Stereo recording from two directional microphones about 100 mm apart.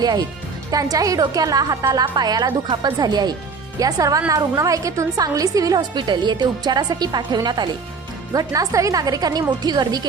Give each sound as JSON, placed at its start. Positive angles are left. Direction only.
{"t": 0.0, "sound": "a woman's voice", "side_deg": -40}